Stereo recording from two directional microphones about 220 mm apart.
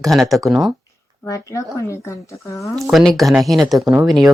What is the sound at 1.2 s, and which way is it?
Speech, 15° left (ahead or behind).